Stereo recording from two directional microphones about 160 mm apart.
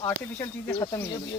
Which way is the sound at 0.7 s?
25° left (ahead or behind).